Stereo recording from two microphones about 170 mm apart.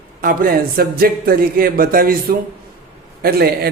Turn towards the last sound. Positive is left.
turn(degrees=-65)  # may be behind; listen again after turning